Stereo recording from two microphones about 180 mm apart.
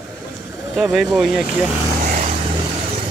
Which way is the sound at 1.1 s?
5° right (ahead or behind).